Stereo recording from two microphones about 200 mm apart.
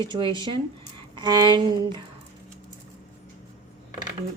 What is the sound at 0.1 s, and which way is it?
Speech, 25° right (ahead or behind).